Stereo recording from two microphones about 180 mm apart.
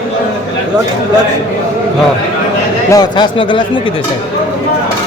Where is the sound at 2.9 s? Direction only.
20° left (ahead or behind).